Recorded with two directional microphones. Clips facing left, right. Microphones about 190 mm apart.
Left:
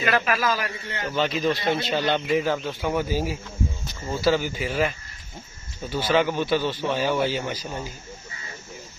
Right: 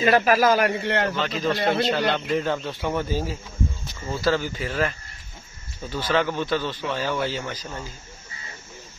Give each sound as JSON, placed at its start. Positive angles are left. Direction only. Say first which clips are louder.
{"t": 0.0, "sound": "a man's voice", "louder": "right 5 dB", "side_deg": -35}
{"t": 0.5, "sound": "a man's voice", "louder": "right 7 dB", "side_deg": -60}
{"t": 1.1, "sound": "a man's voice", "louder": "left 2 dB", "side_deg": 10}
{"t": 1.6, "sound": "a man's voice", "louder": "right 3 dB", "side_deg": -65}
{"t": 2.1, "sound": "a man's voice", "louder": "left 1 dB", "side_deg": 5}